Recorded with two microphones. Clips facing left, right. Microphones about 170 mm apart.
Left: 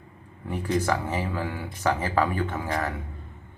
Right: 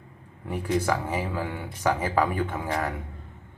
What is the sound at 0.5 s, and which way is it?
Speech, 10° right (ahead or behind).